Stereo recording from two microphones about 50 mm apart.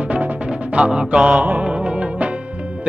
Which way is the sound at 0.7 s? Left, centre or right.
Centre.